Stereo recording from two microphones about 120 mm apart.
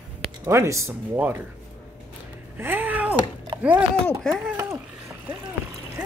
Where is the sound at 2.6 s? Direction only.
15° right (ahead or behind).